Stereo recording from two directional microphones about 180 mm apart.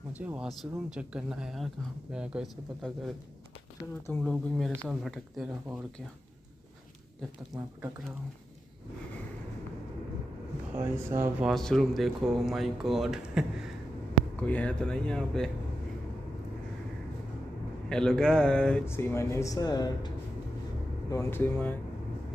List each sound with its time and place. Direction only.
0.1 s speech: 10° right (ahead or behind)
4.1 s speech: 5° left (ahead or behind)
7.5 s speech: 10° right (ahead or behind)
10.8 s speech: 15° right (ahead or behind)
11.4 s speech: centre (ahead or behind)
14.3 s speech: 5° left (ahead or behind)
17.8 s speech: 5° left (ahead or behind); by 20.1 s 20° left (ahead or behind)
21.1 s speech: 15° left (ahead or behind)